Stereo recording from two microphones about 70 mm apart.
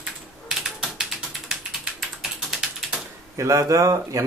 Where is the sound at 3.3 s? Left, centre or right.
Right.